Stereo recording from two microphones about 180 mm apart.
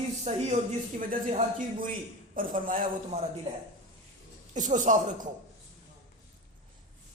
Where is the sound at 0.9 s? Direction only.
45° right (ahead or behind).